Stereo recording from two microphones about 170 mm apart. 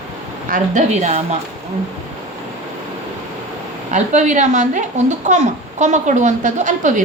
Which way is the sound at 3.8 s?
45° right (ahead or behind).